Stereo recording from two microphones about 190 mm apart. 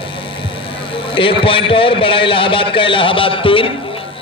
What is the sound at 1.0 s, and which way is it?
A man's voice, 30° left (ahead or behind).